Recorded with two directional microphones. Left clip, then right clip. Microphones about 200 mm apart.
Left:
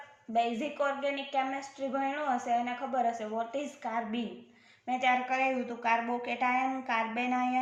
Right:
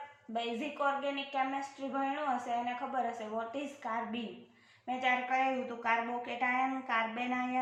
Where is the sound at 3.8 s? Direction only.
55° left (ahead or behind).